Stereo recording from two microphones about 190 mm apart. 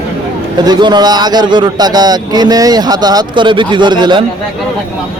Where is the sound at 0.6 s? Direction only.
20° right (ahead or behind).